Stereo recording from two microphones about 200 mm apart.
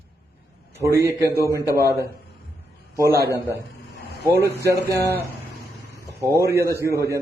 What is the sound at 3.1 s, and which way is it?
A man's voice, 15° right (ahead or behind).